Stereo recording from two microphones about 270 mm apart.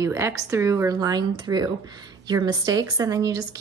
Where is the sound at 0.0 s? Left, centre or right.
Centre.